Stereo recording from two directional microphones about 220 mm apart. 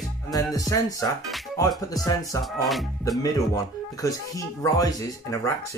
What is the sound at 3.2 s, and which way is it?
Speech, 15° left (ahead or behind).